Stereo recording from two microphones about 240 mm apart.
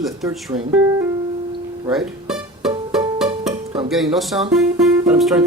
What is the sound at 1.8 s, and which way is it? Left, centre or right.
Music, centre.